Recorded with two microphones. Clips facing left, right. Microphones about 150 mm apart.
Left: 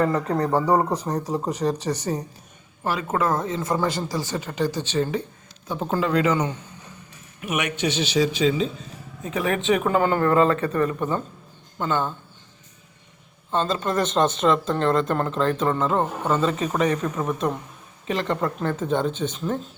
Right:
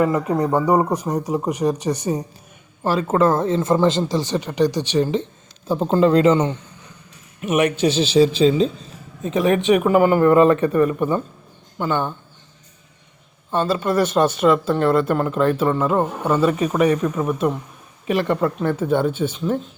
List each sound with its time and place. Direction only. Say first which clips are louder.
0.0 s speech: right 3 dB; 15° right (ahead or behind)
2.8 s speech: right 6 dB; 30° right (ahead or behind); by 5.2 s 15° right (ahead or behind)
5.6 s a man's voice: right 8 dB; 30° right (ahead or behind)
9.2 s speech: right 6 dB; 20° right (ahead or behind)
13.5 s speech: right 4 dB; 10° right (ahead or behind)